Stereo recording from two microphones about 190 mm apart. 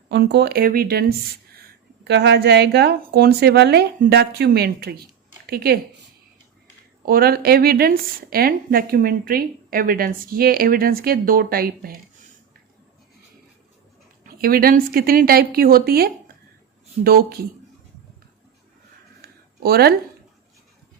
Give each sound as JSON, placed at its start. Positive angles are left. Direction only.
{"t": 0.1, "sound": "a woman's voice", "side_deg": -60}
{"t": 2.0, "sound": "a woman's voice", "side_deg": -65}
{"t": 7.0, "sound": "a woman's voice", "side_deg": -50}
{"t": 14.3, "sound": "a woman's voice", "side_deg": -50}
{"t": 19.2, "sound": "a sound", "side_deg": -55}